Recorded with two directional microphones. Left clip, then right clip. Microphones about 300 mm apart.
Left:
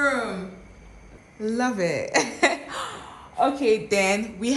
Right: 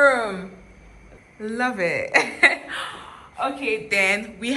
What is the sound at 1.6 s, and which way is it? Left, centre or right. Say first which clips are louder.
A woman's voice: right 3 dB; centre.